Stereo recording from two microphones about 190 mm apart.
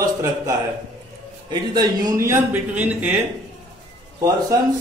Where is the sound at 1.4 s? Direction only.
20° right (ahead or behind).